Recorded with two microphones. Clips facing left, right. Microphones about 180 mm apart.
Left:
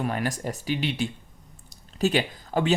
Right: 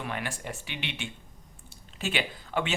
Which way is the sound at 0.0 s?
40° left (ahead or behind).